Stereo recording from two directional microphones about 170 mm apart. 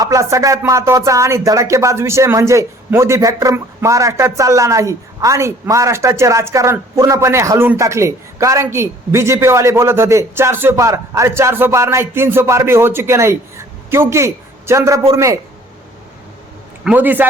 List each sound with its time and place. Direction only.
0.0 s speech: 20° right (ahead or behind)
16.8 s speech: 10° right (ahead or behind)